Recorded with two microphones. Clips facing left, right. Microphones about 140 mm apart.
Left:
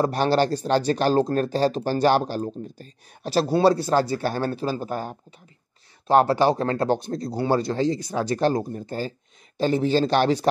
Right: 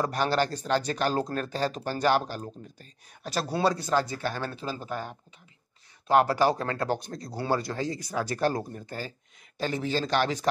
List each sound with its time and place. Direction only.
0.0 s speech: 30° left (ahead or behind)
6.0 s speech: 30° left (ahead or behind)